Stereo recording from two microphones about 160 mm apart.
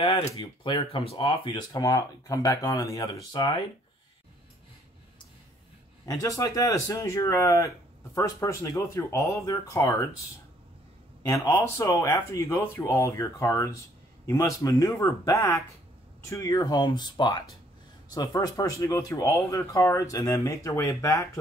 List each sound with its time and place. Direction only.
0.4 s speech: 30° left (ahead or behind)
6.0 s speech: 20° left (ahead or behind)
11.2 s speech: 20° left (ahead or behind)